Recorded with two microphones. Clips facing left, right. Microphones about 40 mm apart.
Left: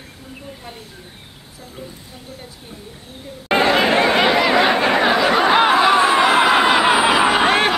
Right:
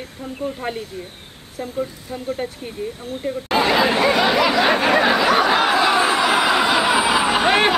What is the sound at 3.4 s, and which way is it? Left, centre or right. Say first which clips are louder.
Chatter: left 2 dB; left.